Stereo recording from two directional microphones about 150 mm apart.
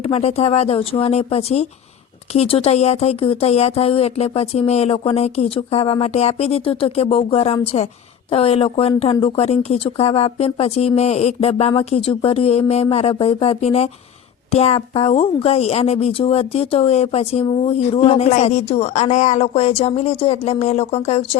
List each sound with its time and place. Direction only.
0.0 s a woman's voice: 45° left (ahead or behind)